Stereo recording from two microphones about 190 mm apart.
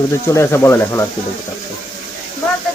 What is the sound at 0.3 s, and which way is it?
Speech, 15° left (ahead or behind).